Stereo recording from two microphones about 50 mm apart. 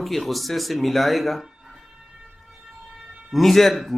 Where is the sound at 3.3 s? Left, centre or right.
Centre.